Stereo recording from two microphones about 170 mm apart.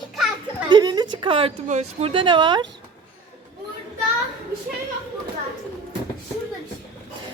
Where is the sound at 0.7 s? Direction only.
25° right (ahead or behind).